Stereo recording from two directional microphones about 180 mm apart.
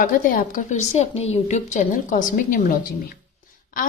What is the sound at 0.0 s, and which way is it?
A woman's voice, 50° left (ahead or behind).